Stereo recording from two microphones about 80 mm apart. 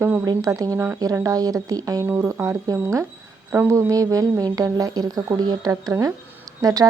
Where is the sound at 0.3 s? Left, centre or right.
Right.